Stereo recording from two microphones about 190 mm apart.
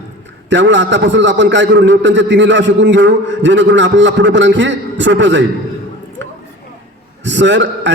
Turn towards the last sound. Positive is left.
turn(degrees=-70)  # may be behind; listen again after turning